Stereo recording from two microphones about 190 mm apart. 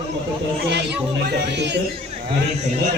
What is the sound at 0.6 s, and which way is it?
Speech, 65° right (ahead or behind).